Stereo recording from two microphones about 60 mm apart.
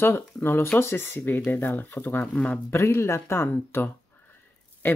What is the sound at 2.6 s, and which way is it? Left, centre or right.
Speech, left.